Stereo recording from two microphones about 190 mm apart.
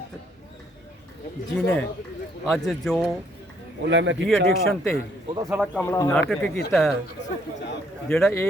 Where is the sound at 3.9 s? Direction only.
70° right (ahead or behind).